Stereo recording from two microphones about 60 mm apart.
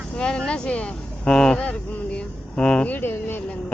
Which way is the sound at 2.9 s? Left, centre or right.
Left.